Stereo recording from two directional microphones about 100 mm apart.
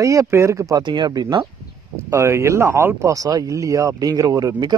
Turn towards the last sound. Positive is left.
turn(degrees=-40)  # may be behind; listen again after turning